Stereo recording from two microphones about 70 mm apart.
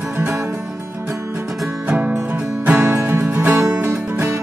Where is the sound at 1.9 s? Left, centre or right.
Centre.